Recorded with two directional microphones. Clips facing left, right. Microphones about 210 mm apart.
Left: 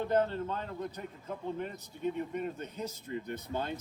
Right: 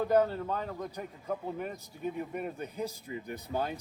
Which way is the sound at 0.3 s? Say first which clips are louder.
Right 2 dB; 10° right (ahead or behind).